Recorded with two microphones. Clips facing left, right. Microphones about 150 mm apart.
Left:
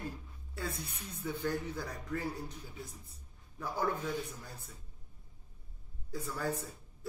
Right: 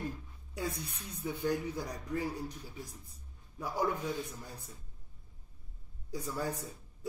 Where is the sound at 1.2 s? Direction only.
15° right (ahead or behind).